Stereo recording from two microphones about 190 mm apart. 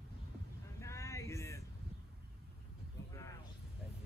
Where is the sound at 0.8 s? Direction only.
15° left (ahead or behind).